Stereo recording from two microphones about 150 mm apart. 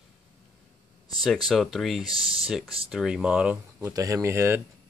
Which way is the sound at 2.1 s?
35° right (ahead or behind).